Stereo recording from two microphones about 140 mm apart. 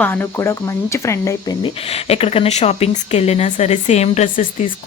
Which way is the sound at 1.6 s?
45° left (ahead or behind).